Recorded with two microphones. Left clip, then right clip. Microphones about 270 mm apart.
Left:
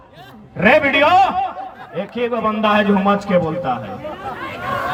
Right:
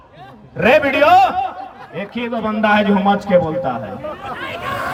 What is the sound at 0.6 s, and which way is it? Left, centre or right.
Speech, right.